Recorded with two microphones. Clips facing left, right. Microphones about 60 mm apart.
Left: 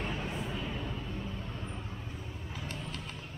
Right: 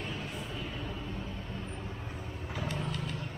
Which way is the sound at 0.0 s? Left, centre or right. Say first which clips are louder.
Left 2 dB; left.